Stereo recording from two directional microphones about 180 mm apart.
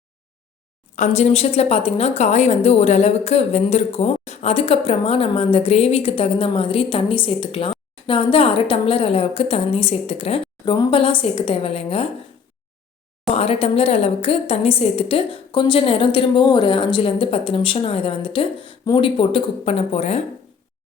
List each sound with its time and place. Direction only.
0.9 s a woman's voice: 40° left (ahead or behind)
13.3 s a woman's voice: 35° left (ahead or behind)